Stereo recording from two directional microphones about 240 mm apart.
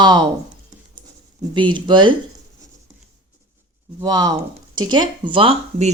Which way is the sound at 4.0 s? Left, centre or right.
Centre.